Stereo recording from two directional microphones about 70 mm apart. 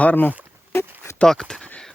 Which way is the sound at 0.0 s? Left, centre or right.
Left.